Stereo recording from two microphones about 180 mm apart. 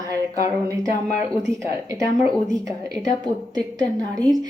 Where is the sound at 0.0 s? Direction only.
20° right (ahead or behind).